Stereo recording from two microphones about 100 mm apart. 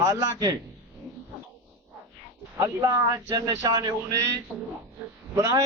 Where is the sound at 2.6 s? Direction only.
35° right (ahead or behind).